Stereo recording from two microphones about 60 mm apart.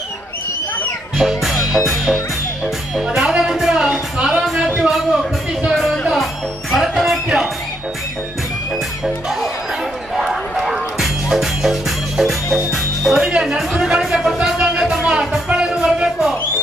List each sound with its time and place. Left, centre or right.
1.1 s speech: centre
3.8 s a sound: centre
5.7 s music: centre
9.0 s music: centre